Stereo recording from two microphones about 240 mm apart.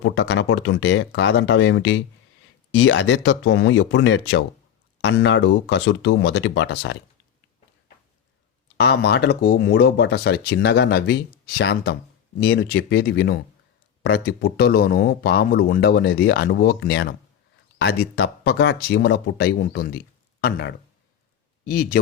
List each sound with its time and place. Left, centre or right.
0.0 s speech: left
8.8 s speech: left
18.2 s speech: left